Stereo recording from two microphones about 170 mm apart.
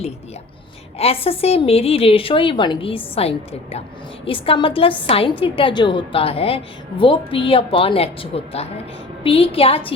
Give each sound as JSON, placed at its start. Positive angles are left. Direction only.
{"t": 0.9, "sound": "a woman's voice", "side_deg": 35}